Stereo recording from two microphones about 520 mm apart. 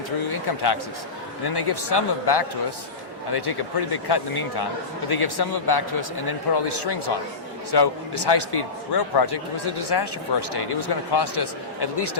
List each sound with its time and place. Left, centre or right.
0.3 s a man's voice: left